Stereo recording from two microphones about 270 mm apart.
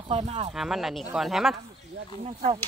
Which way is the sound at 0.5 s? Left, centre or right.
Centre.